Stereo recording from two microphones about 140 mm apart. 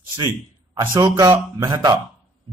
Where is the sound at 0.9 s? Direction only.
25° right (ahead or behind).